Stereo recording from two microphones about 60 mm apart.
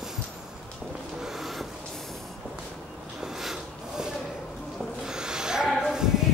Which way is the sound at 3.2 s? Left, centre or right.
Centre.